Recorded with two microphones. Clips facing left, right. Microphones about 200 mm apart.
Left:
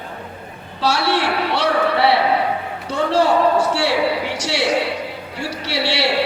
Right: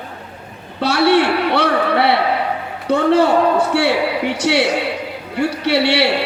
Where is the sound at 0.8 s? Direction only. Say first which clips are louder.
Right 5 dB; 60° right (ahead or behind).